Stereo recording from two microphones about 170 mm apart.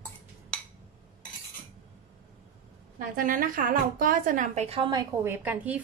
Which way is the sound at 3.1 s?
55° right (ahead or behind).